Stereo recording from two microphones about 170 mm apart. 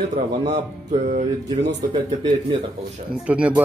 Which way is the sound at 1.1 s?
85° right.